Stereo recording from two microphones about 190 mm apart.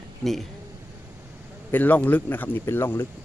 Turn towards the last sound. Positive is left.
turn(degrees=10)  # may be behind; listen again after turning